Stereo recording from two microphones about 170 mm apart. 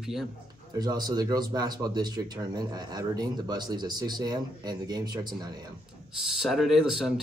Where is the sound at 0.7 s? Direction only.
25° right (ahead or behind).